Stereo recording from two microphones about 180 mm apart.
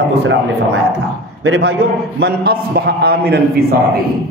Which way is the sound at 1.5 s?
65° right (ahead or behind).